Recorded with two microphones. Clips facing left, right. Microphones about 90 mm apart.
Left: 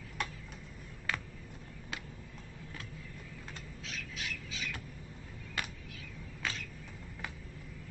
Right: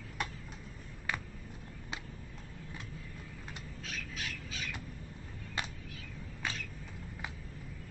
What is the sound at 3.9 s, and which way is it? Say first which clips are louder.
Squawk: even; 45° right (ahead or behind).